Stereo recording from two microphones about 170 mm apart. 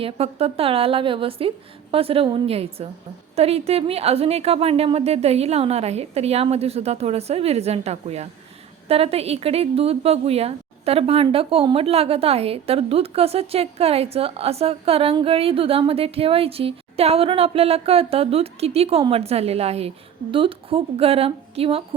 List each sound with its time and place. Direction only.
0.0 s a woman's voice: 35° right (ahead or behind)